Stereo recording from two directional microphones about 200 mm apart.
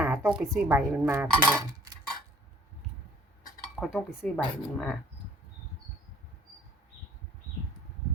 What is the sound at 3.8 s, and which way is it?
A woman's voice, centre (ahead or behind).